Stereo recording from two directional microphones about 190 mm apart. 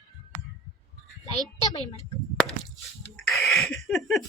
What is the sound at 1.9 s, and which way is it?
Speech, 30° left (ahead or behind).